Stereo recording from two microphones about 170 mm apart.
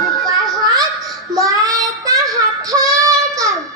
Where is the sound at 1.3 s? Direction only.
20° right (ahead or behind).